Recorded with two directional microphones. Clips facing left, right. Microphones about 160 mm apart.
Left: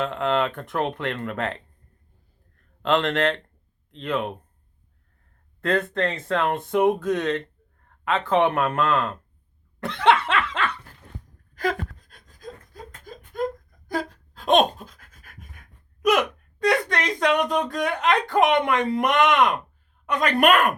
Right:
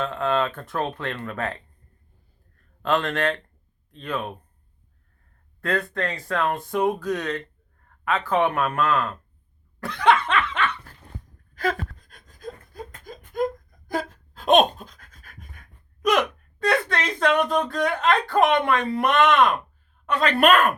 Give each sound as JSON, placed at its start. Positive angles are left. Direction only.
{"t": 0.0, "sound": "speech", "side_deg": 20}
{"t": 2.8, "sound": "speech", "side_deg": 20}
{"t": 5.5, "sound": "speech", "side_deg": 20}
{"t": 9.8, "sound": "laughter", "side_deg": 25}
{"t": 11.5, "sound": "a sound", "side_deg": 15}
{"t": 13.1, "sound": "a sound", "side_deg": -15}
{"t": 13.9, "sound": "pant", "side_deg": 0}
{"t": 16.6, "sound": "speech", "side_deg": 15}